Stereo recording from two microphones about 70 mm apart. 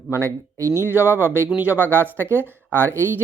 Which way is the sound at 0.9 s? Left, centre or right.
Right.